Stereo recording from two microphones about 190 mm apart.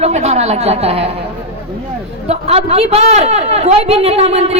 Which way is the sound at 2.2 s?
35° right (ahead or behind).